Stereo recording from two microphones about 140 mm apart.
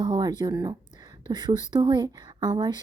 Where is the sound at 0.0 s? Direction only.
30° right (ahead or behind).